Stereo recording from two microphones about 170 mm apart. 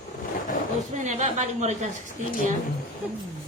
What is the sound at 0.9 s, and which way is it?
Speech, 45° right (ahead or behind).